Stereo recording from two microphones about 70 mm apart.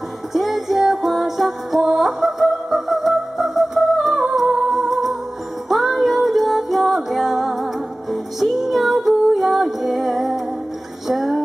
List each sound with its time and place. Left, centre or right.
0.3 s music: centre
4.2 s humming: centre
5.7 s music: centre